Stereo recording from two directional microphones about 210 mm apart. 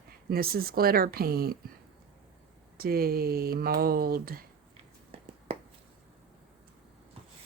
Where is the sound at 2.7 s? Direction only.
45° right (ahead or behind).